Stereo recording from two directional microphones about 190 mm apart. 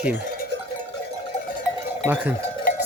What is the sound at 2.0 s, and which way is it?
Speech, 10° right (ahead or behind).